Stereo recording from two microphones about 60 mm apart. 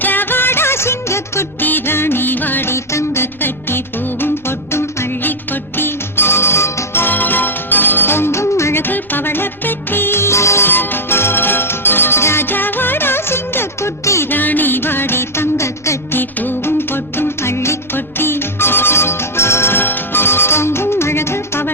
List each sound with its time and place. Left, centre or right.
0.0 s music of bollywood: left
1.6 s music: left
5.2 s music: left
7.0 s music: left
8.8 s music: left
10.7 s music: left
14.0 s music: left
14.3 s music: left
16.1 s music: left